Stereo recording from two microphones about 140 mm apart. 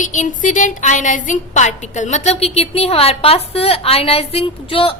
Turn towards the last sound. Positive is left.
turn(degrees=40)  # may be behind; listen again after turning